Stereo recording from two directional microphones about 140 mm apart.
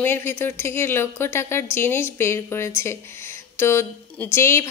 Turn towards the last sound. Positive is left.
turn(degrees=20)  # may be behind; listen again after turning